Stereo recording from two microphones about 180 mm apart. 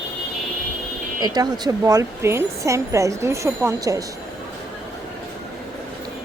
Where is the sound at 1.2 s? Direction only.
20° right (ahead or behind).